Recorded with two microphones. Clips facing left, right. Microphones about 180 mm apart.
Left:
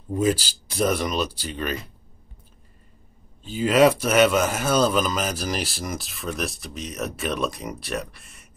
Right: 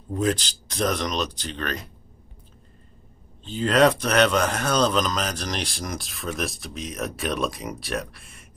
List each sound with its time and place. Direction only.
0.1 s speech: 5° left (ahead or behind)
3.4 s a man's voice: 5° left (ahead or behind)